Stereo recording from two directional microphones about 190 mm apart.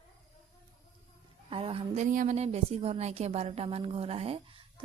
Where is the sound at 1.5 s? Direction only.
30° right (ahead or behind).